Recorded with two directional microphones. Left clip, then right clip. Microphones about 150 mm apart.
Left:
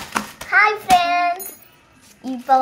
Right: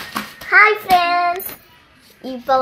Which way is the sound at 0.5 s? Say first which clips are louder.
Right 3 dB; 70° right (ahead or behind).